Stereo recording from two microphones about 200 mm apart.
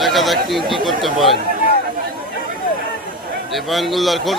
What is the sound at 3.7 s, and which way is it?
Speech, centre (ahead or behind).